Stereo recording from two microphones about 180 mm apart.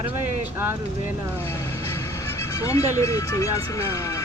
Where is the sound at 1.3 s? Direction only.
15° left (ahead or behind).